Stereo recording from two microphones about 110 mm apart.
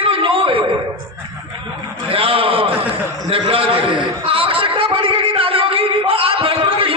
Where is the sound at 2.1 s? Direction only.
60° right (ahead or behind).